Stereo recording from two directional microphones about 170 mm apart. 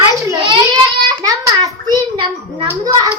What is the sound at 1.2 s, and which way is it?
A child's voice, 20° right (ahead or behind).